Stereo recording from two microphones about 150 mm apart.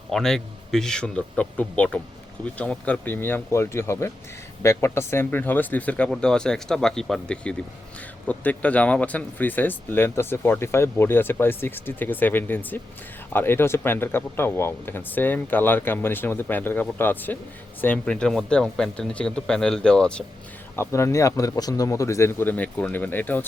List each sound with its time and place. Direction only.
0.1 s speech: 5° left (ahead or behind)
20.7 s speech: 20° left (ahead or behind)